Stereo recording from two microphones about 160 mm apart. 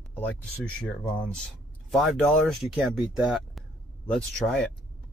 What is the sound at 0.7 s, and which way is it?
Speech, 5° left (ahead or behind).